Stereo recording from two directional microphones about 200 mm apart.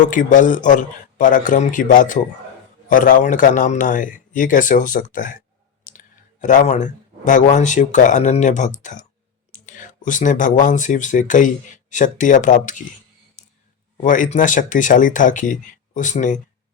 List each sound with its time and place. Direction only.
0.0 s speech: 40° left (ahead or behind)
13.4 s a sound: 40° left (ahead or behind)
14.0 s speech: 40° left (ahead or behind)